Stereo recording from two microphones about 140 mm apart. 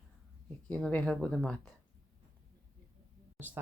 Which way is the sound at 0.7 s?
5° left (ahead or behind).